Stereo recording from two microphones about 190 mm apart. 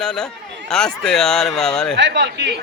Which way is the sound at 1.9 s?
70° right (ahead or behind).